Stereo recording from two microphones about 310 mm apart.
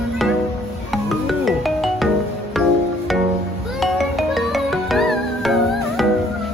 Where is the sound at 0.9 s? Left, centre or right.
Centre.